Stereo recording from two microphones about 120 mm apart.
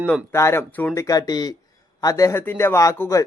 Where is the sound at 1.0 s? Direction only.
30° left (ahead or behind).